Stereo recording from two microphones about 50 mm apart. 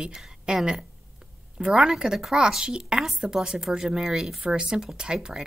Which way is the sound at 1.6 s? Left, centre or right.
Centre.